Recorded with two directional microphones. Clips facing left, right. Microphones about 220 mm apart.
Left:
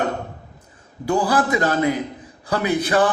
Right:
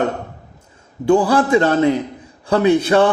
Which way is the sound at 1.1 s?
25° right (ahead or behind).